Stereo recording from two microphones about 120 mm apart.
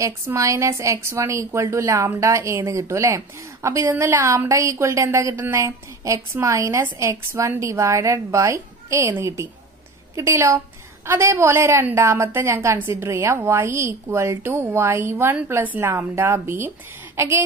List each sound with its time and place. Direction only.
0.0 s a woman's voice: 25° right (ahead or behind)